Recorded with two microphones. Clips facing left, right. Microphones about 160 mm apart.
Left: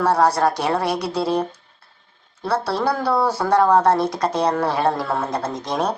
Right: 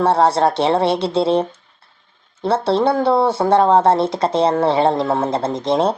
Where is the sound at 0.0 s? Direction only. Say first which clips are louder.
Right 3 dB; 25° right (ahead or behind).